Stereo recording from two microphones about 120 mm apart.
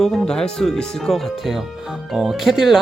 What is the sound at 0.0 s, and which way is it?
Speech, centre (ahead or behind).